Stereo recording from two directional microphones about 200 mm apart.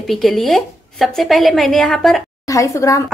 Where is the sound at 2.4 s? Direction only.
15° left (ahead or behind).